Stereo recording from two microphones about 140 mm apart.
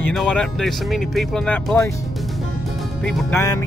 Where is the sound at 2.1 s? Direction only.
Centre (ahead or behind).